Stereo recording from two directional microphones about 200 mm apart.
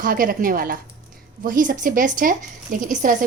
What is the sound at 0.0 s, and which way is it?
A woman's voice, 45° right (ahead or behind).